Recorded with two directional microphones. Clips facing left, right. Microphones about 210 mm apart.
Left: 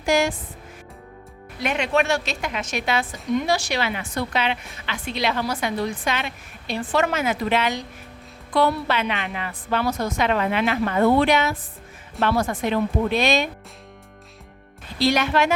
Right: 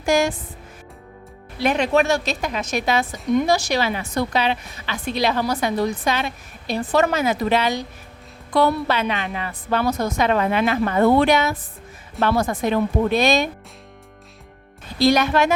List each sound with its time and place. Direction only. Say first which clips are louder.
0.0 s speech: right 2 dB; 45° right (ahead or behind)
1.5 s a woman's voice: right 4 dB; 35° right (ahead or behind)
14.9 s speech: right 3 dB; 40° right (ahead or behind)